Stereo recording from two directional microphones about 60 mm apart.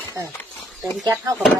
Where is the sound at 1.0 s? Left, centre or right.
Right.